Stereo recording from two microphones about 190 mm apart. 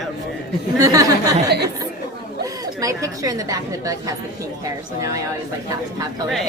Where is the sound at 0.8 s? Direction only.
20° right (ahead or behind).